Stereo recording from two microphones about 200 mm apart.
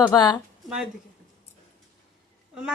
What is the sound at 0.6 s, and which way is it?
Speech, centre (ahead or behind).